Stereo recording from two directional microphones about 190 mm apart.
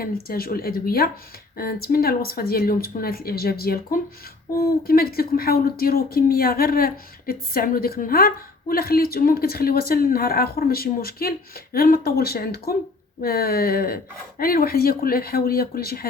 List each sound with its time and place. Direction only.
0.0 s speech: 50° left (ahead or behind)